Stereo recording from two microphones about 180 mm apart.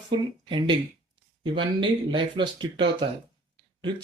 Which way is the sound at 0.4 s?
25° right (ahead or behind).